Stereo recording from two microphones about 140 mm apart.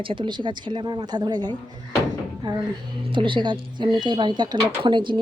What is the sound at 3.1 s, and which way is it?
Speech, 35° right (ahead or behind).